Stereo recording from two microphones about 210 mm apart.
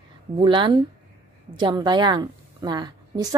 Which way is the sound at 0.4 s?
25° right (ahead or behind).